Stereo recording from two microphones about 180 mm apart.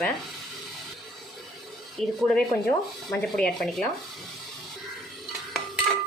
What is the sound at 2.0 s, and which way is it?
Speech, centre (ahead or behind).